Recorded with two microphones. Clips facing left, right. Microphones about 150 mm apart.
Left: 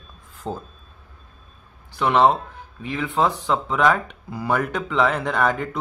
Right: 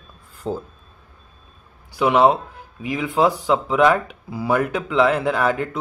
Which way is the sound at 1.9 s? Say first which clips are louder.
Right 2 dB; 10° right (ahead or behind).